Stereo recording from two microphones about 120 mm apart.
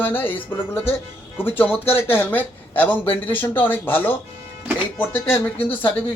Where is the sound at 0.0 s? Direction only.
15° left (ahead or behind).